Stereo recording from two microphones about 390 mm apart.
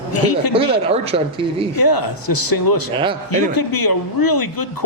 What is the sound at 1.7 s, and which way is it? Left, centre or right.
Speech, left.